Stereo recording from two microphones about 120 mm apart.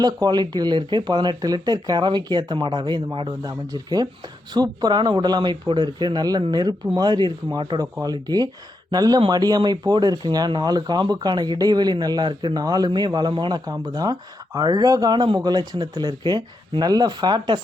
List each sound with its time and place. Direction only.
0.0 s speech: 35° right (ahead or behind)